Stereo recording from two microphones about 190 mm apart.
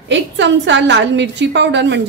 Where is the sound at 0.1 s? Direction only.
70° right (ahead or behind).